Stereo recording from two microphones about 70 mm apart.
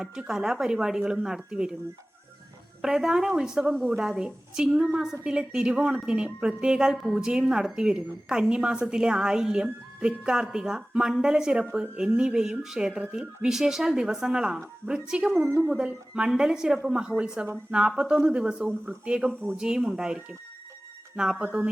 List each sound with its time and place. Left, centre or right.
0.0 s a woman's voice: centre
2.8 s a woman's voice: centre
21.2 s a woman's voice: centre